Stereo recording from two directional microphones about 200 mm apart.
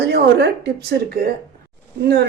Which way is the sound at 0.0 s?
55° right (ahead or behind).